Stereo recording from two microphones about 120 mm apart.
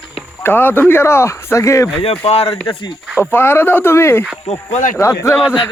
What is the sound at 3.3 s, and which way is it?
Speech, 20° left (ahead or behind).